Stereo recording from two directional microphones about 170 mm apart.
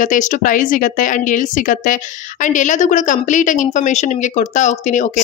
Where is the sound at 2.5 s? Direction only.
45° left (ahead or behind).